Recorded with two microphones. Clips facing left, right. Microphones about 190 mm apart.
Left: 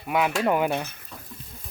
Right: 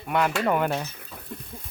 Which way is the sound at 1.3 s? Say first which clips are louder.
Right 10 dB; 60° right (ahead or behind).